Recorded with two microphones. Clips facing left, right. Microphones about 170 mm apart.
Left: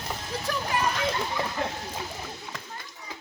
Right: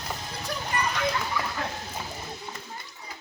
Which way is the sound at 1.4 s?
25° left (ahead or behind).